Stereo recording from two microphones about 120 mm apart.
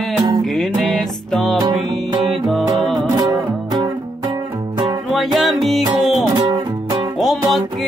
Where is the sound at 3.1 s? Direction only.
35° right (ahead or behind).